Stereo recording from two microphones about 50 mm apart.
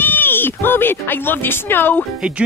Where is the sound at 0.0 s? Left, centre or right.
Left.